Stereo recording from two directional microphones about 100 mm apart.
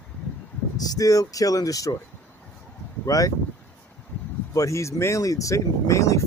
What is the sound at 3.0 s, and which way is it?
Speech, 35° left (ahead or behind).